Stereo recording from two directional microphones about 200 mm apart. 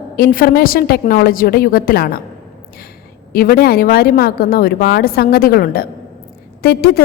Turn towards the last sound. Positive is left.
turn(degrees=50)  # may be behind; listen again after turning